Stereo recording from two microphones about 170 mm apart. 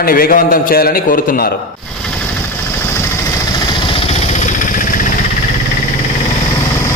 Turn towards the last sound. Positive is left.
turn(degrees=50)  # may be behind; listen again after turning